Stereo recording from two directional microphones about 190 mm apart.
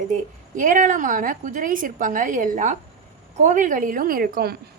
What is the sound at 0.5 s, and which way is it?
A woman's voice, 45° right (ahead or behind).